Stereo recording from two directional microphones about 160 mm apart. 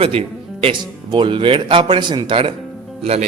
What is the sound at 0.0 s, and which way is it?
A man's voice, 35° right (ahead or behind).